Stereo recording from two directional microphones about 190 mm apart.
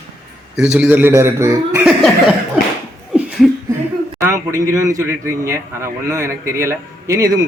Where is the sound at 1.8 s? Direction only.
5° right (ahead or behind).